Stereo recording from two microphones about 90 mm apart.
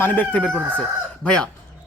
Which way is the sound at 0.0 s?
20° left (ahead or behind).